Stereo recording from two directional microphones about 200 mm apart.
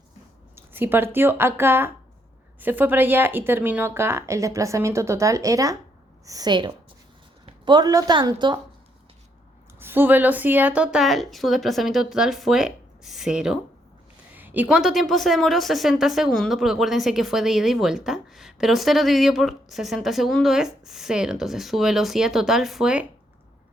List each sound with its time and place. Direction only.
0.5 s a woman's voice: 10° right (ahead or behind)
9.8 s speech: 10° right (ahead or behind)